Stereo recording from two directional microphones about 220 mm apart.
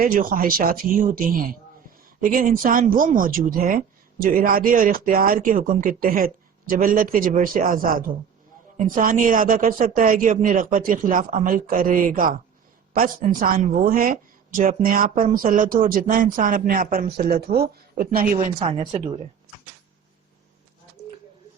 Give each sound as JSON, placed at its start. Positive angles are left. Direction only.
{"t": 0.0, "sound": "speech", "side_deg": -40}
{"t": 2.2, "sound": "speech", "side_deg": -40}